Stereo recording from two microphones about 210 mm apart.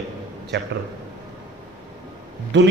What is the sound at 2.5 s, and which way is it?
Speech, 60° right (ahead or behind).